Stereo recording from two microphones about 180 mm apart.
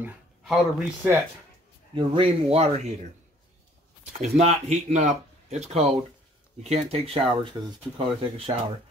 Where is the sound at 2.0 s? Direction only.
30° right (ahead or behind).